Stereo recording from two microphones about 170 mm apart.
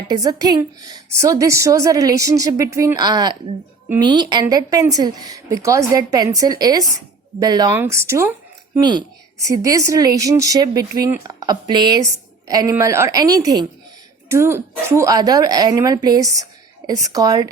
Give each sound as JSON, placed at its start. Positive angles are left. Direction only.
{"t": 0.1, "sound": "a woman's voice", "side_deg": -20}
{"t": 8.8, "sound": "a woman's voice", "side_deg": -25}